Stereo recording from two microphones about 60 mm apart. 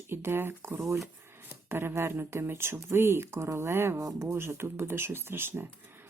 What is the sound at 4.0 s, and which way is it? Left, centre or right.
Speech, right.